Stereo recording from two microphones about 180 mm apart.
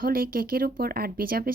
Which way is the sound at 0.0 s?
55° right (ahead or behind).